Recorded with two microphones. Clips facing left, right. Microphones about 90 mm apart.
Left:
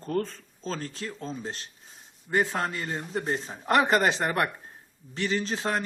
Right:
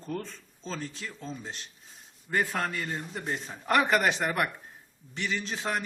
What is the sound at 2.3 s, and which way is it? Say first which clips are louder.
Speech: left 3 dB; 25° left (ahead or behind).